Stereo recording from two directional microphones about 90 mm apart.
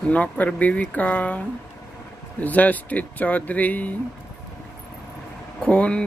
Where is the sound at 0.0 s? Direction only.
15° left (ahead or behind).